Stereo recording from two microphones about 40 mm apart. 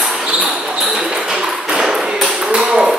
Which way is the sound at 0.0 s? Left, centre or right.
Centre.